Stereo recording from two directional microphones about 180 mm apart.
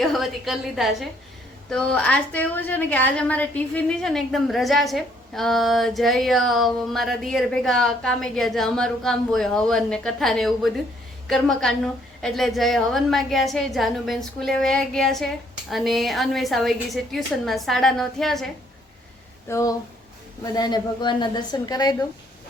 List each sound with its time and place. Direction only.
0.0 s a woman's voice: centre (ahead or behind)
19.5 s a woman's voice: 15° left (ahead or behind)